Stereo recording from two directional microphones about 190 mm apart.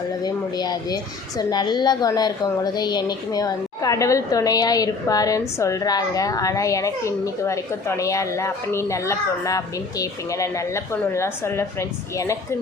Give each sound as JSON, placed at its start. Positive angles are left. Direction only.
{"t": 0.2, "sound": "a woman's voice", "side_deg": 20}